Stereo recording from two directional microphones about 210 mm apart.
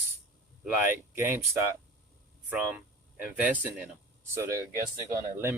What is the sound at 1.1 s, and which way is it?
Speech, 10° right (ahead or behind).